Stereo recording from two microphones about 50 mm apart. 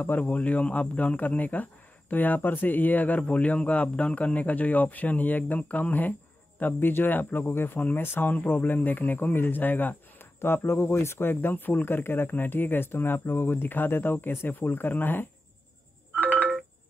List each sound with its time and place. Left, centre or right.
0.0 s speech: left
7.4 s speech: left
10.4 s speech: left
16.2 s ringtone: right